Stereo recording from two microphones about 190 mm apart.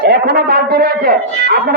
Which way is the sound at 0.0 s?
55° right (ahead or behind).